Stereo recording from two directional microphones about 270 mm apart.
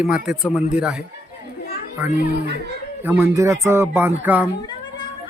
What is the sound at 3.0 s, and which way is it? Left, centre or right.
A man's voice, centre.